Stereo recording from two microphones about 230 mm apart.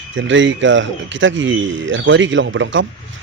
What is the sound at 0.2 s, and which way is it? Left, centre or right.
A man's voice, right.